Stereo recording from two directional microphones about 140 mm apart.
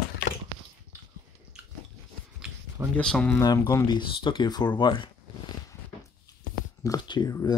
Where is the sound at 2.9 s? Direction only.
5° left (ahead or behind).